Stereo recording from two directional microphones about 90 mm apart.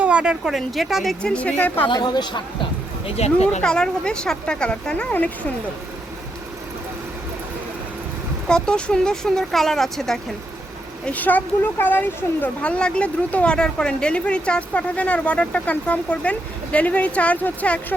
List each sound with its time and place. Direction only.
0.0 s speech: 15° right (ahead or behind)
1.2 s speech: 10° left (ahead or behind)
1.9 s a woman's voice: 50° left (ahead or behind)
3.6 s speech: 10° left (ahead or behind)
8.4 s speech: 10° left (ahead or behind)
11.0 s speech: 20° left (ahead or behind)